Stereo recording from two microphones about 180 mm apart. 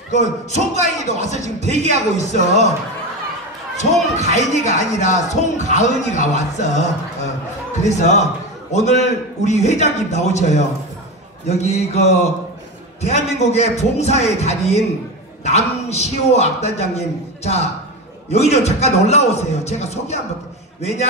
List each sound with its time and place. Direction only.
0.1 s speech: 40° left (ahead or behind)
1.6 s a man's voice: 40° right (ahead or behind)
2.1 s speech: 40° left (ahead or behind)
4.2 s speech: 40° left (ahead or behind)